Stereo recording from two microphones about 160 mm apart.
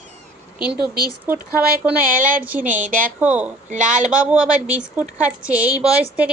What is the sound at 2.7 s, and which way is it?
Speech, 55° right (ahead or behind).